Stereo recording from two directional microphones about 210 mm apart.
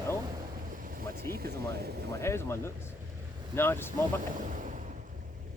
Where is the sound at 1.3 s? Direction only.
50° right (ahead or behind).